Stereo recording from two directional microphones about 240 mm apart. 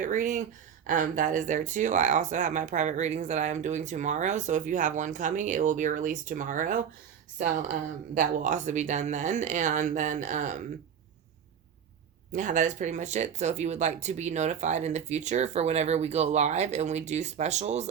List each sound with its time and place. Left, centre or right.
0.0 s speech: right
12.3 s speech: right